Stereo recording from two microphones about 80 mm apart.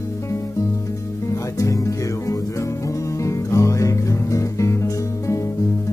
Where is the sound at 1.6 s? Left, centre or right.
Left.